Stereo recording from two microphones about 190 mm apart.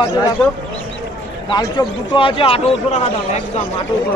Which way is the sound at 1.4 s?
25° left (ahead or behind).